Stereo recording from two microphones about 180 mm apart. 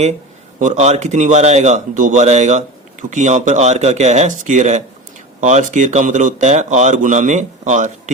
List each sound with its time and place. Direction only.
0.6 s a man's voice: 40° right (ahead or behind)